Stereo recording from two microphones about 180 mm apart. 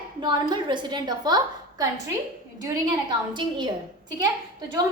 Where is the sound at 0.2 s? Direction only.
25° right (ahead or behind).